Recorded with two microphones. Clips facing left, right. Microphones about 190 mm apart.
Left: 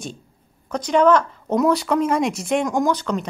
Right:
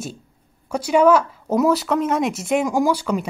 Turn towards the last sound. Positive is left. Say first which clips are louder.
# right 1 dB
turn(degrees=-10)  # may be behind; listen again after turning